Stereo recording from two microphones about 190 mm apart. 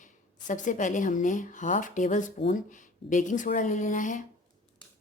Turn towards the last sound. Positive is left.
turn(degrees=40)  # may be behind; listen again after turning